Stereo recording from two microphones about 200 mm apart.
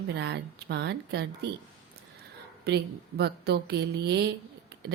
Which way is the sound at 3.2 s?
55° right (ahead or behind).